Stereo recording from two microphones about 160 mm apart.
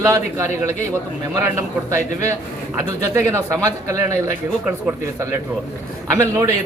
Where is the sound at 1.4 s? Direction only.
15° right (ahead or behind).